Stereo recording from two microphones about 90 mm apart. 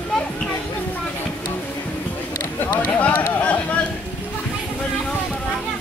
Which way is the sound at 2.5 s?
15° left (ahead or behind).